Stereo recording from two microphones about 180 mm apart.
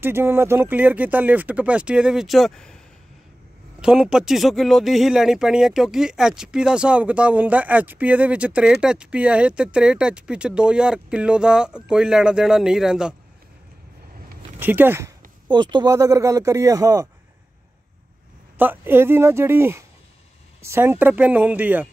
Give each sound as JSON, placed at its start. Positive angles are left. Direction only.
{"t": 0.0, "sound": "speech", "side_deg": -10}
{"t": 3.8, "sound": "speech", "side_deg": -5}
{"t": 14.6, "sound": "speech", "side_deg": -10}
{"t": 18.6, "sound": "speech", "side_deg": -10}